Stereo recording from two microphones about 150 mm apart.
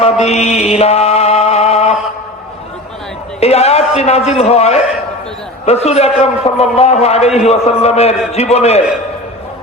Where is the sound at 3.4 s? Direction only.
45° left (ahead or behind).